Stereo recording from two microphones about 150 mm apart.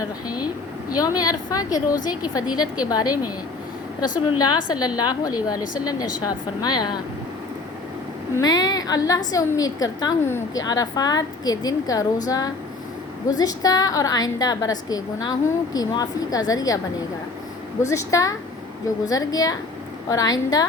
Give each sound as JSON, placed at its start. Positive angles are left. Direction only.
{"t": 0.9, "sound": "a woman's voice", "side_deg": 25}
{"t": 8.4, "sound": "a woman's voice", "side_deg": 25}
{"t": 17.8, "sound": "a woman's voice", "side_deg": 20}